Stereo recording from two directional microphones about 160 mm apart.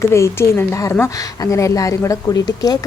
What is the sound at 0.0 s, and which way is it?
A woman's voice, 15° left (ahead or behind).